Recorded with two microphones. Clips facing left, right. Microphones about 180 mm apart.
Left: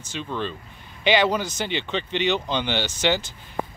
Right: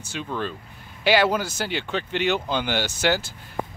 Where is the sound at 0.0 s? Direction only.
10° right (ahead or behind).